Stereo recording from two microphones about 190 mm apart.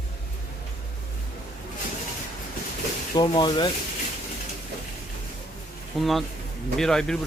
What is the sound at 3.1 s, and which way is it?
Speech, 20° left (ahead or behind).